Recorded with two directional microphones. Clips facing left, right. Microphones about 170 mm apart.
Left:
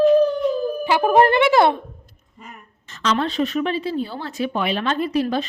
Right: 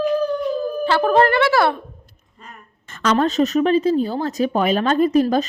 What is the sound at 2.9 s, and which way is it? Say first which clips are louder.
A woman's voice: right 4 dB; 50° right (ahead or behind).